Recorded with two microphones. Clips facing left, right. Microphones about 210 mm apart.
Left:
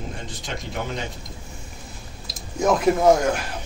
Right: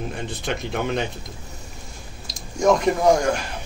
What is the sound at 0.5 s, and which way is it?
Speech, 65° right (ahead or behind).